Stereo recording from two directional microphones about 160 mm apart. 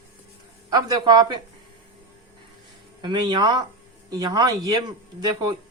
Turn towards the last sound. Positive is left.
turn(degrees=-25)  # may be behind; listen again after turning